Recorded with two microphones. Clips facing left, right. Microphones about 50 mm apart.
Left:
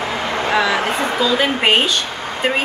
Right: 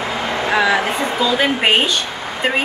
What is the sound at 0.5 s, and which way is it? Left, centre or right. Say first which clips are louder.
Speech: right 2 dB; right.